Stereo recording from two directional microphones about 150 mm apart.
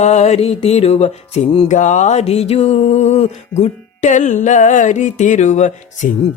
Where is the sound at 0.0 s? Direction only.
50° left (ahead or behind).